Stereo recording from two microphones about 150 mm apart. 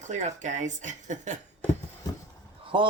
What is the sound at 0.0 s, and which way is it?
Speech, 55° right (ahead or behind).